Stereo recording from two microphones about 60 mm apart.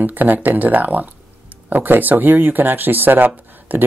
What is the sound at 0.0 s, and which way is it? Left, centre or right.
Speech, right.